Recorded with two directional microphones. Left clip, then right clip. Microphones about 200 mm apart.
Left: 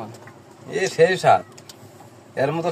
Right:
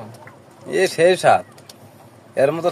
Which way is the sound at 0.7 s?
55° right (ahead or behind).